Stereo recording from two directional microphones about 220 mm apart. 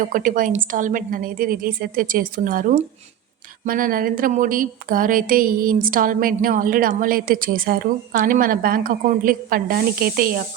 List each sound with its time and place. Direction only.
0.0 s speech: 35° right (ahead or behind)